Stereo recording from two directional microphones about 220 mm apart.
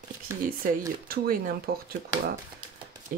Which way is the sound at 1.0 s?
45° right (ahead or behind).